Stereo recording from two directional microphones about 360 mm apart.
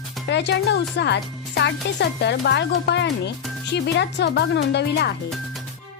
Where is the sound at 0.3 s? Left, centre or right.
Left.